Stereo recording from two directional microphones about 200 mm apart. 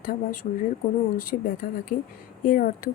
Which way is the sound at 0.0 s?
45° left (ahead or behind).